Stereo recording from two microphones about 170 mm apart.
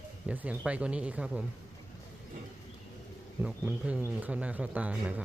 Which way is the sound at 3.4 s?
5° right (ahead or behind).